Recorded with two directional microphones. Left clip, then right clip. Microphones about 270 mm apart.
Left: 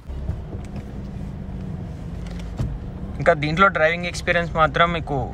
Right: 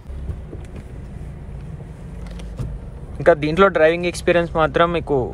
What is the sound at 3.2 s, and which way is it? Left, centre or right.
Speech, centre.